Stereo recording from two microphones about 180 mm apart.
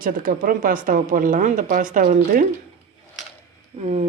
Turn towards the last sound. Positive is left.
turn(degrees=-35)  # may be behind; listen again after turning